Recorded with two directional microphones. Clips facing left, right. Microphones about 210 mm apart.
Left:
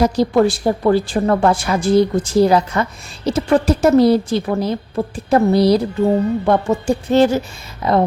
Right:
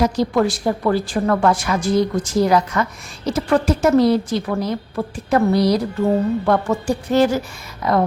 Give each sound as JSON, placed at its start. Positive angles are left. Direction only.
{"t": 0.0, "sound": "a woman's voice", "side_deg": 30}
{"t": 6.1, "sound": "a woman's voice", "side_deg": 20}